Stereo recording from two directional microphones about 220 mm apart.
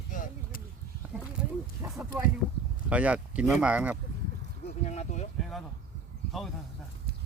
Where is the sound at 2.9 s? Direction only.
5° right (ahead or behind).